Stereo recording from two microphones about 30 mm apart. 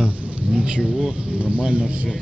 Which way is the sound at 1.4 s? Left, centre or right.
Right.